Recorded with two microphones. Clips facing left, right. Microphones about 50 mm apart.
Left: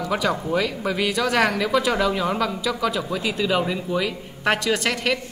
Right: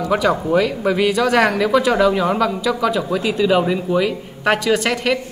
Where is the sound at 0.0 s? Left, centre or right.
Centre.